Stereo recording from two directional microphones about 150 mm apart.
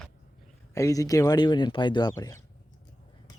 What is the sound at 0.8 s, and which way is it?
Speech, 20° left (ahead or behind).